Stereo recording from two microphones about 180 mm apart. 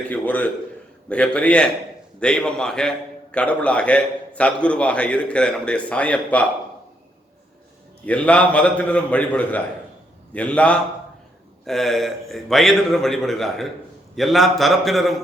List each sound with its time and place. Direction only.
0.0 s a man's voice: 10° left (ahead or behind)
8.0 s a man's voice: 5° left (ahead or behind)